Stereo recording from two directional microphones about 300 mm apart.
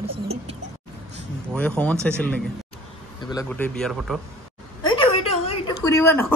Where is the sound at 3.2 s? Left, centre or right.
Centre.